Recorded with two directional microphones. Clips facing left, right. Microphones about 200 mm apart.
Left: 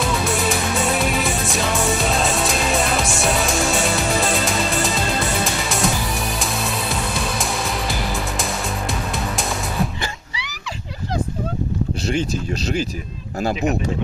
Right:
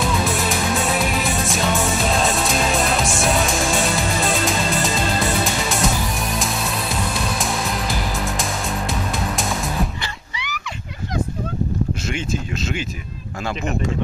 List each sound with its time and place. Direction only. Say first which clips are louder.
0.0 s music: even; centre (ahead or behind)
12.1 s speech: left 3 dB; 35° left (ahead or behind)